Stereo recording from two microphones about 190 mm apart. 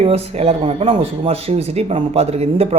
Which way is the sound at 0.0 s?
30° right (ahead or behind).